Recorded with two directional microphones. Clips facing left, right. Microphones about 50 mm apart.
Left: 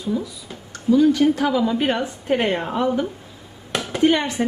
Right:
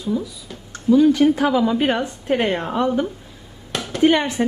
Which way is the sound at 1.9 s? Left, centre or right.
Centre.